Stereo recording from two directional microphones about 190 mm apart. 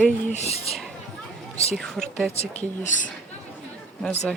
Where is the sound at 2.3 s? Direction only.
35° left (ahead or behind).